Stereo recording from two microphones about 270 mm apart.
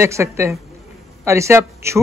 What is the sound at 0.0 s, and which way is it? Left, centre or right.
A man's voice, centre.